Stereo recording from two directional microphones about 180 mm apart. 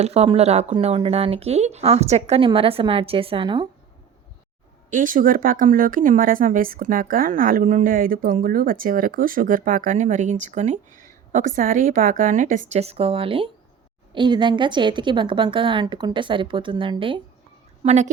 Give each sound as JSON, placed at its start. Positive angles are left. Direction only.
{"t": 0.0, "sound": "speech", "side_deg": -35}
{"t": 4.9, "sound": "a woman's voice", "side_deg": -50}
{"t": 17.8, "sound": "speech", "side_deg": -40}